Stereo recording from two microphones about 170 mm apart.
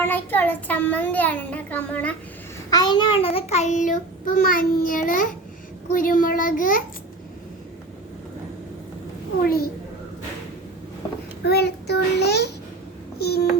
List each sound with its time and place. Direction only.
0.0 s a child's voice: 10° left (ahead or behind)
2.6 s child singing: 25° left (ahead or behind); by 6.8 s 55° left (ahead or behind)
11.4 s child singing: 75° left (ahead or behind)
13.1 s babbling: 70° left (ahead or behind)